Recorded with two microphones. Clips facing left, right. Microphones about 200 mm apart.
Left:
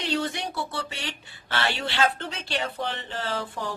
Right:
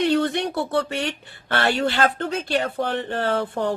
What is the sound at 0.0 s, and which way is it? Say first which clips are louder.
Speech: right 8 dB; 55° right (ahead or behind).